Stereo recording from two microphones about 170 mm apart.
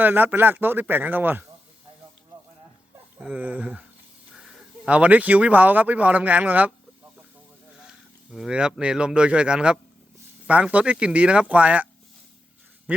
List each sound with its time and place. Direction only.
0.0 s speech: 10° right (ahead or behind)
3.2 s speech: 5° right (ahead or behind)
7.9 s speech: centre (ahead or behind)